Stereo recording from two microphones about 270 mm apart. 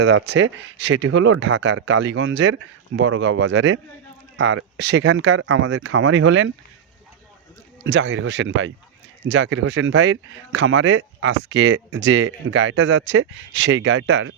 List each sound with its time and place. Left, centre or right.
0.0 s speech: right
7.9 s speech: right